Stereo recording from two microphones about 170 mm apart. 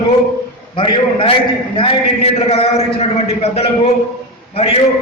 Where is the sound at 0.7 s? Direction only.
30° left (ahead or behind).